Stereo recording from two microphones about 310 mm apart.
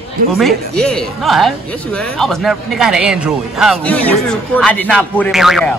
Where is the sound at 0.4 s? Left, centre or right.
Centre.